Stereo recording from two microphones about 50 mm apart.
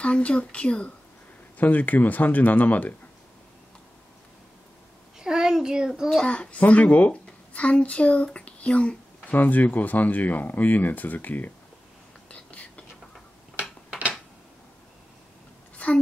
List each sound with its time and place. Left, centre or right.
0.0 s speech: left
1.6 s speech: left
5.2 s a sound: centre
6.0 s a child's voice: centre
9.3 s speech: left
12.3 s whispering: left